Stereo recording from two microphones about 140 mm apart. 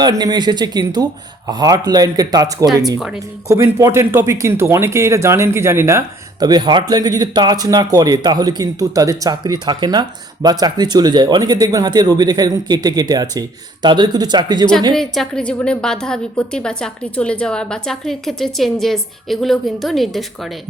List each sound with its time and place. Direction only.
0.0 s speech: 30° right (ahead or behind)
6.4 s speech: 30° right (ahead or behind)
14.9 s a woman's voice: centre (ahead or behind)